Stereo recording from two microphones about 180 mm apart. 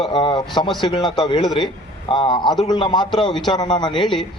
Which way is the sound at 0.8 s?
25° left (ahead or behind).